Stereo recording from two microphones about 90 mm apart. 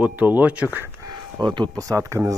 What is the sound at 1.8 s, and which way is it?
Speech, 35° right (ahead or behind).